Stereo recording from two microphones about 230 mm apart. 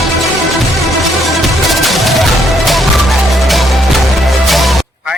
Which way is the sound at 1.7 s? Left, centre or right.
Centre.